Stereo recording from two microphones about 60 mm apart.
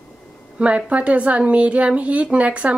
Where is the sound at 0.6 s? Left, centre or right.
Right.